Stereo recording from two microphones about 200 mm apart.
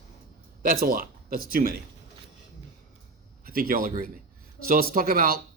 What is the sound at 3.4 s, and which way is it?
Speech, 45° right (ahead or behind).